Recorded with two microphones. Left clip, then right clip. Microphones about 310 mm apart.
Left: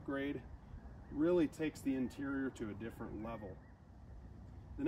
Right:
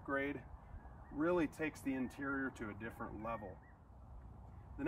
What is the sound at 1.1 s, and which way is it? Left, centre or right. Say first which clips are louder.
Speech: left 2 dB; centre.